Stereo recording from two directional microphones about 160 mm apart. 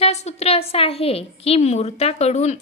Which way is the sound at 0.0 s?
45° left (ahead or behind).